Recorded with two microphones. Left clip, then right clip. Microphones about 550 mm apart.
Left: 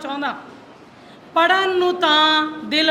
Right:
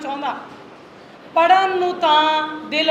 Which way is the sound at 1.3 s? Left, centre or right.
Left.